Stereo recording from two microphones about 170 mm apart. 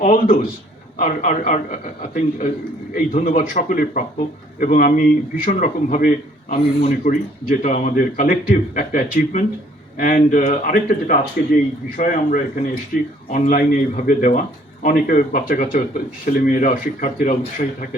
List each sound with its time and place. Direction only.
0.0 s speech: 55° left (ahead or behind)